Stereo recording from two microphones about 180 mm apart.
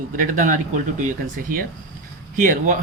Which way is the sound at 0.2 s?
45° right (ahead or behind).